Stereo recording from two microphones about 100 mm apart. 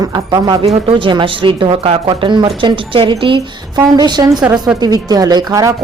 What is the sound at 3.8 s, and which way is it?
A woman's voice, 45° right (ahead or behind).